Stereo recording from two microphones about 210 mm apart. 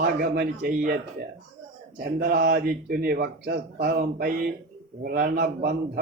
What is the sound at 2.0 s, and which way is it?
Speech, 45° right (ahead or behind).